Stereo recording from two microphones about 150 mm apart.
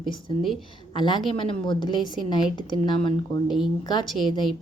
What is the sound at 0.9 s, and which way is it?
A woman's voice, 30° left (ahead or behind).